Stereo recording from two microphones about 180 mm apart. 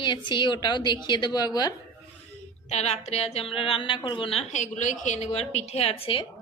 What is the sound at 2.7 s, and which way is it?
A woman's voice, 40° left (ahead or behind).